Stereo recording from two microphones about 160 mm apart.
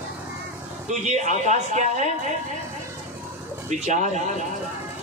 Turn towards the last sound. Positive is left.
turn(degrees=-50)  # may be behind; listen again after turning